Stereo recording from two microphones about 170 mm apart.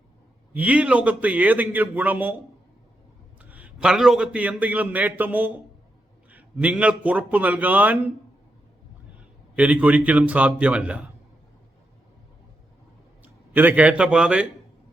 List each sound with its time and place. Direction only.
0.5 s a man's voice: 10° right (ahead or behind)
3.5 s a man's voice: 5° right (ahead or behind)
9.6 s a man's voice: 5° right (ahead or behind)
13.2 s a man's voice: 10° right (ahead or behind)